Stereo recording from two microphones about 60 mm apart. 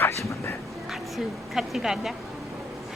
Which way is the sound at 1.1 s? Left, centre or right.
Centre.